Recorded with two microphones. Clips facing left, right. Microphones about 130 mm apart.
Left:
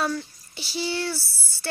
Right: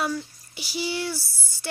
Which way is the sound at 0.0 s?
10° right (ahead or behind).